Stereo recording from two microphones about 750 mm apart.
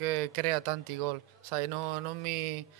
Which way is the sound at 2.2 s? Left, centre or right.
Right.